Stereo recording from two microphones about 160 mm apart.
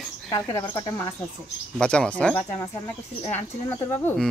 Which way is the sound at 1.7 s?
5° left (ahead or behind).